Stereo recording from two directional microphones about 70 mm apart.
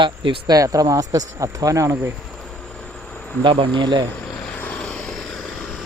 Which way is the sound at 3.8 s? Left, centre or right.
Right.